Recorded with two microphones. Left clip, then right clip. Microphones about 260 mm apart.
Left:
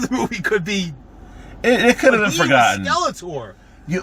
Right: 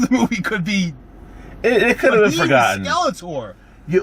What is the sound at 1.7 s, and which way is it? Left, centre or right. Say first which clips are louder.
A man's voice: left 1 dB; centre.